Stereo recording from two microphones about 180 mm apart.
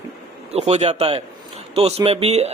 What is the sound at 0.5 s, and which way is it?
Speech, 35° right (ahead or behind).